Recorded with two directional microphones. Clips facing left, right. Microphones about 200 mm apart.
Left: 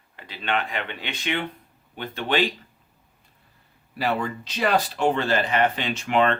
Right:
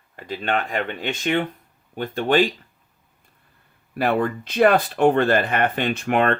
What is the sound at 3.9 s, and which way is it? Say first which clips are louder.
Speech: right 5 dB; 55° right (ahead or behind).